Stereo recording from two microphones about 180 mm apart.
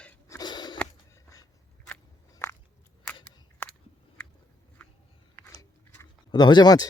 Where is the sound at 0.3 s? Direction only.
25° left (ahead or behind).